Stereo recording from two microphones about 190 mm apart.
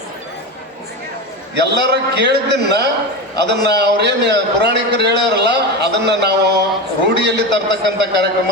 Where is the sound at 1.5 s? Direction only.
60° right (ahead or behind).